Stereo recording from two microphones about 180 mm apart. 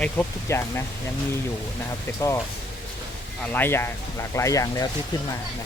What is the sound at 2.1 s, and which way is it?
Speech, 15° left (ahead or behind).